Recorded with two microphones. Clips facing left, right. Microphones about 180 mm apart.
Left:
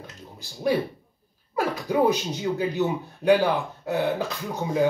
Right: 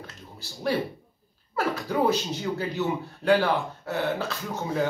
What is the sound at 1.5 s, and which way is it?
Speech, 15° left (ahead or behind).